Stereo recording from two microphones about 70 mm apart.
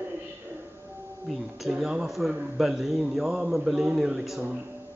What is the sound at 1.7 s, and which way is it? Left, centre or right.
A man's voice, centre.